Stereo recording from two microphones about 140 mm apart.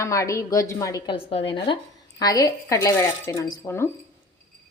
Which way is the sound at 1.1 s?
40° left (ahead or behind).